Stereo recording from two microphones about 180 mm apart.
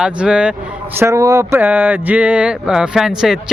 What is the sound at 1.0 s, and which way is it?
Speech, 20° right (ahead or behind).